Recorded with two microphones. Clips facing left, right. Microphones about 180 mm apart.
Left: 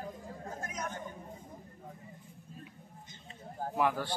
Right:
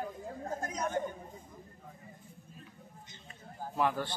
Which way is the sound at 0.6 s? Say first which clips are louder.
Right 3 dB; 35° right (ahead or behind).